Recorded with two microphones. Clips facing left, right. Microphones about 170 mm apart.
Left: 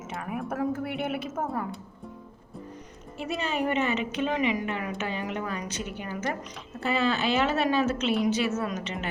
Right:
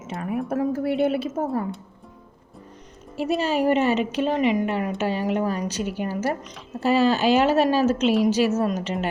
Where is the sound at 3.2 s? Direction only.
35° right (ahead or behind).